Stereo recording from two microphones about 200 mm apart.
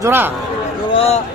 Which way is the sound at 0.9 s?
30° left (ahead or behind).